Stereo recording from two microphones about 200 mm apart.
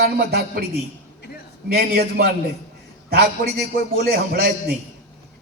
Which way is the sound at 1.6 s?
50° right (ahead or behind).